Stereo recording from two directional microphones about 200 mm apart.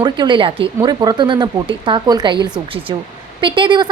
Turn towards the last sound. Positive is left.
turn(degrees=-20)  # may be behind; listen again after turning